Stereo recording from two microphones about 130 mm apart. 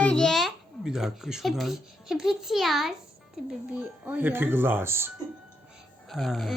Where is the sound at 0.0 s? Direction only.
5° left (ahead or behind).